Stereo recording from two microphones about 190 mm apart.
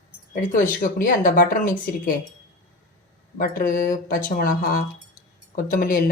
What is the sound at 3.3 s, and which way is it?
A woman's voice, 45° left (ahead or behind).